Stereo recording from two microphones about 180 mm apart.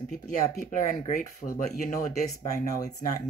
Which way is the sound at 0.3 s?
45° left (ahead or behind).